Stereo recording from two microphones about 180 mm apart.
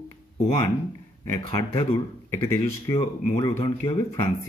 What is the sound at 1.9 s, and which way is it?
Speech, 20° left (ahead or behind).